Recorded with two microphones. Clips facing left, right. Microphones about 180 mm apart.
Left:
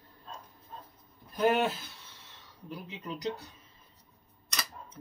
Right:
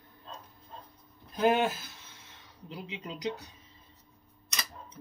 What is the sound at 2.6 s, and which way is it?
Speech, 15° right (ahead or behind).